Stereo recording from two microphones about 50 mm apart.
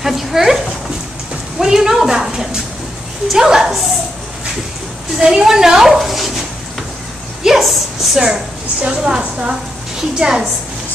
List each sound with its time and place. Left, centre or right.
0.0 s speech: centre
1.6 s speech: centre
5.2 s speech: centre
7.4 s speech: centre
8.8 s a woman's voice: centre